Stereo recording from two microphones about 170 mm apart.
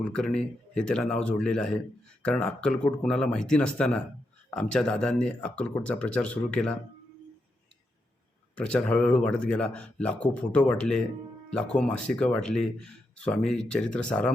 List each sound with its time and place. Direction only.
0.1 s speech: 5° left (ahead or behind)
8.5 s speech: 5° left (ahead or behind)